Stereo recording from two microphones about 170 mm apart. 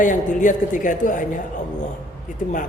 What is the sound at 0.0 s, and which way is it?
A man's voice, 50° left (ahead or behind).